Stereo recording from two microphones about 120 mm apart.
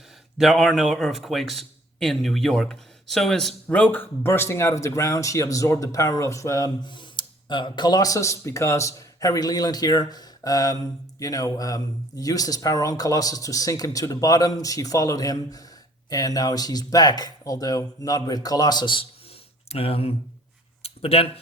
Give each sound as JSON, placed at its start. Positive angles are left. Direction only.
{"t": 0.3, "sound": "a man's voice", "side_deg": 0}
{"t": 19.6, "sound": "speech", "side_deg": 55}
{"t": 20.8, "sound": "a sound", "side_deg": 55}